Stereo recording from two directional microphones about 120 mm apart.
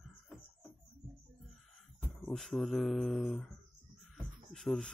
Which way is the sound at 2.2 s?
Centre (ahead or behind).